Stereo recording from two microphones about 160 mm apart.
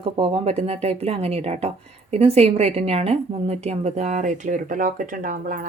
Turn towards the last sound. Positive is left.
turn(degrees=-60)  # may be behind; listen again after turning